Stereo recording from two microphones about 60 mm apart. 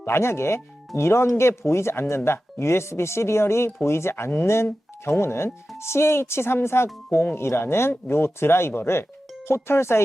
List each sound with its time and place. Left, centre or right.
0.0 s speech: left